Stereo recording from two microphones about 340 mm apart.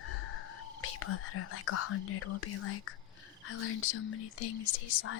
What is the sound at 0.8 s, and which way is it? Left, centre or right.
Speech, left.